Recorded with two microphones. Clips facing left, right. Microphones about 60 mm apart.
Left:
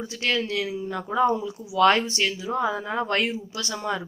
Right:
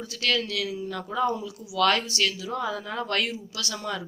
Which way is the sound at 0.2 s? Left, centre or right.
Left.